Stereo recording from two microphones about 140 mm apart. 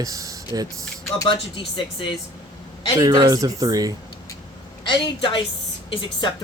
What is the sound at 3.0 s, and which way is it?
Speech, 30° right (ahead or behind).